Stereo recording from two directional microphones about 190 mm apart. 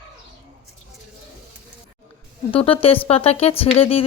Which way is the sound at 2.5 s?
30° left (ahead or behind).